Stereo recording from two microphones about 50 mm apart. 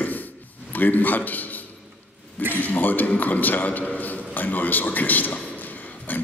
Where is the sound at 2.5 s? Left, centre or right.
Left.